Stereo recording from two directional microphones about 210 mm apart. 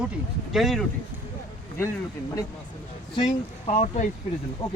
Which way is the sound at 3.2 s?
20° left (ahead or behind).